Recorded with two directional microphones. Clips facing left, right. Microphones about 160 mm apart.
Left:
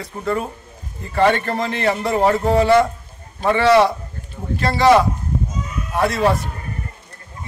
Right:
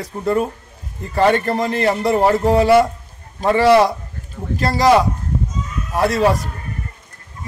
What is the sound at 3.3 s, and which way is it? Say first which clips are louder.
Speech: right 2 dB; 35° right (ahead or behind).